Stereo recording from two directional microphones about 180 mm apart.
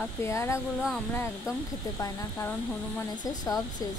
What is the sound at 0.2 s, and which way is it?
Speech, 15° left (ahead or behind).